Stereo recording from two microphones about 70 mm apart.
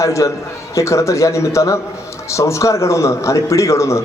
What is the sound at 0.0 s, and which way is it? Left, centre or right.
A man's voice, left.